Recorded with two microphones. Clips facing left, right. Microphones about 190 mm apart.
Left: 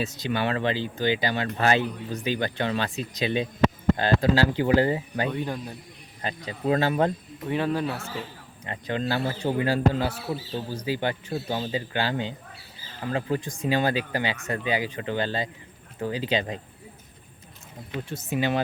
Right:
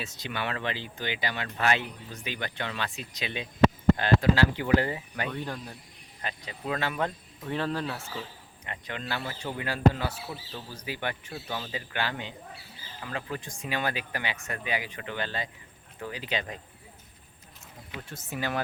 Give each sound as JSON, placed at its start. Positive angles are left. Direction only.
{"t": 0.0, "sound": "speech", "side_deg": 35}
{"t": 5.3, "sound": "speech", "side_deg": 15}
{"t": 6.2, "sound": "speech", "side_deg": 35}
{"t": 7.4, "sound": "speech", "side_deg": 15}
{"t": 8.6, "sound": "speech", "side_deg": 35}
{"t": 18.1, "sound": "speech", "side_deg": 20}